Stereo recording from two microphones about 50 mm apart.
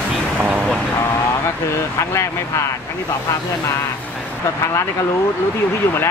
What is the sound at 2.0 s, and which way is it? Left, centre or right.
Speech, left.